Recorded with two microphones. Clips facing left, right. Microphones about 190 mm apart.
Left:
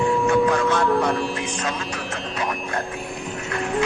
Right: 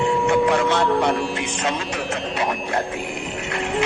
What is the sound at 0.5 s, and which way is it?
Speech, 25° right (ahead or behind).